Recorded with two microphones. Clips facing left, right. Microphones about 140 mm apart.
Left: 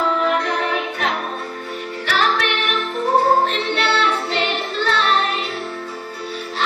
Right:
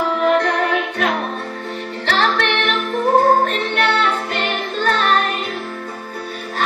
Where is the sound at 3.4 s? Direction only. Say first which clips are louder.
Right 1 dB; 45° right (ahead or behind).